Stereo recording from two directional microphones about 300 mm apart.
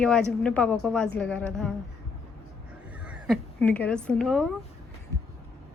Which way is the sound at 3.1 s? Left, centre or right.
Centre.